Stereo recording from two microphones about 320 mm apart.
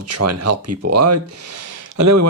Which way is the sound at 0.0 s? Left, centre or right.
Right.